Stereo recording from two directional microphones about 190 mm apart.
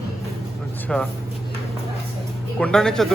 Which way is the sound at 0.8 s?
5° left (ahead or behind).